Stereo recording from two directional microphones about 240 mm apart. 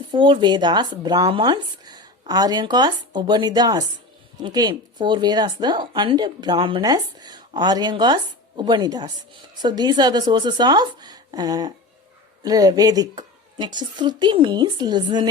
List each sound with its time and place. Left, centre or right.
0.1 s speech: centre